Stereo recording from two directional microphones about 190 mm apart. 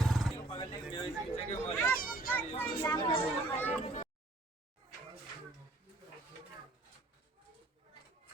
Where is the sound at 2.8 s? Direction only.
20° left (ahead or behind).